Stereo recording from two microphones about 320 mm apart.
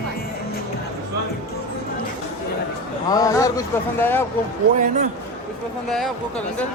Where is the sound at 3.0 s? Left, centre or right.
Centre.